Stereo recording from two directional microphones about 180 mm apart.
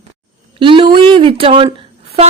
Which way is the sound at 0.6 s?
30° right (ahead or behind).